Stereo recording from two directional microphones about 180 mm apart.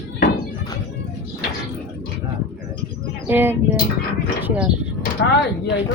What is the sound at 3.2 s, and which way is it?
Speech, 10° right (ahead or behind).